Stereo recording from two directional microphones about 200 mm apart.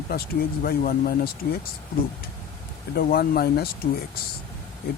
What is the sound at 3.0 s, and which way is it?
Speech, 50° left (ahead or behind).